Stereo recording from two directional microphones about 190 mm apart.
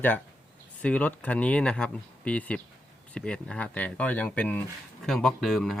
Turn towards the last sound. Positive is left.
turn(degrees=0)  # may be behind; listen again after turning